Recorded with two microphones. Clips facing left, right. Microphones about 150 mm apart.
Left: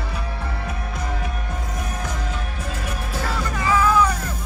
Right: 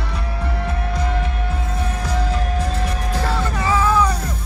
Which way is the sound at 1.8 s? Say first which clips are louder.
Right 6 dB; 30° right (ahead or behind).